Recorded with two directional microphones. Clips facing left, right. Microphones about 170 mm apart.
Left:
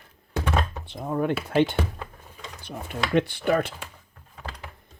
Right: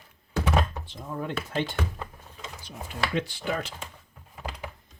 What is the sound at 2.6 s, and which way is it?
Speech, 60° left (ahead or behind).